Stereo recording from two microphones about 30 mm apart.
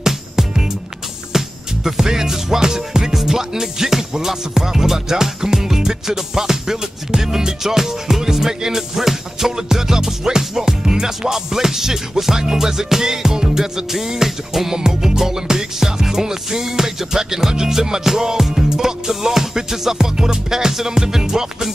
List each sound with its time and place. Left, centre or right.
1.3 s music: centre